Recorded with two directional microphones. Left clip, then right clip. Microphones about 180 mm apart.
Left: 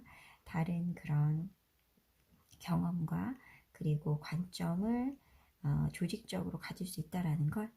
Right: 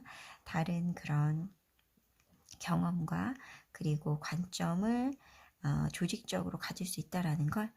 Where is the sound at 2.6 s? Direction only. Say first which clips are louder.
Right 3 dB; 30° right (ahead or behind).